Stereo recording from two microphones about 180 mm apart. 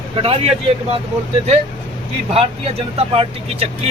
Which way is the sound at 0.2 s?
35° right (ahead or behind).